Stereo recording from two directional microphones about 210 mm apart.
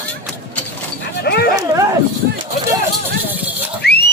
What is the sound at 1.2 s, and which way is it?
Dog, 50° left (ahead or behind).